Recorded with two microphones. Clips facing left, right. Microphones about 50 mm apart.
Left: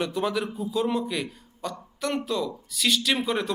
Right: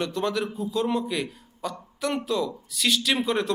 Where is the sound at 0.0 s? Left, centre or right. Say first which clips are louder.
Even; centre.